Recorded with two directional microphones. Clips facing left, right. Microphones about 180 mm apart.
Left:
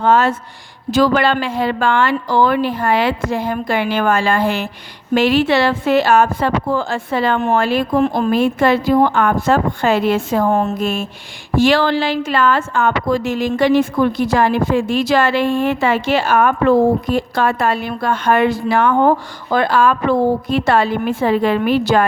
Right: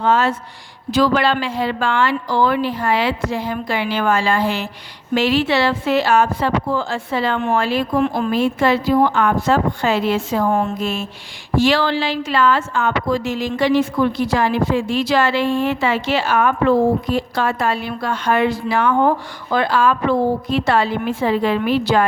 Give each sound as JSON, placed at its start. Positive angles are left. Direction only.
{"t": 0.0, "sound": "a woman's voice", "side_deg": 50}
{"t": 8.0, "sound": "a woman's voice", "side_deg": 40}